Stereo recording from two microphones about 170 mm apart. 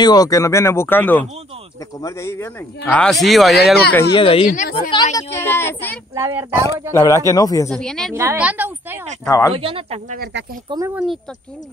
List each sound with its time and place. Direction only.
0.0 s speech: 20° left (ahead or behind); by 3.7 s centre (ahead or behind)
4.1 s speech: 30° left (ahead or behind)
4.5 s a woman's voice: 55° left (ahead or behind)
4.9 s speech: 20° left (ahead or behind)
6.1 s speech: 15° right (ahead or behind)
6.9 s speech: 20° left (ahead or behind)
7.7 s a woman's voice: 5° left (ahead or behind)
8.1 s speech: 15° right (ahead or behind)
9.2 s speech: 20° left (ahead or behind)
9.6 s speech: 35° right (ahead or behind)
10.1 s speech: 65° right (ahead or behind)
10.7 s speech: 25° right (ahead or behind)